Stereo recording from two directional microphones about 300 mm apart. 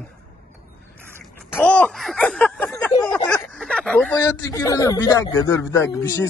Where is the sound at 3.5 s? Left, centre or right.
Centre.